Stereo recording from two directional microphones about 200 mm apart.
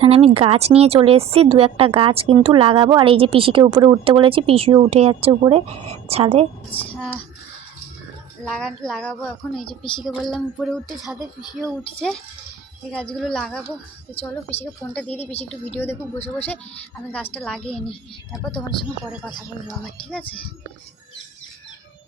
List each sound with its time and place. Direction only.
0.0 s a woman's voice: 30° right (ahead or behind)
6.7 s speech: 10° left (ahead or behind)
8.4 s speech: 5° left (ahead or behind)
9.6 s speech: 25° left (ahead or behind)
10.2 s speech: centre (ahead or behind)
14.5 s a woman's voice: 30° left (ahead or behind)
14.9 s speech: 5° left (ahead or behind)
15.2 s a woman's voice: 30° left (ahead or behind)
15.7 s speech: 10° left (ahead or behind)
17.3 s speech: 5° left (ahead or behind)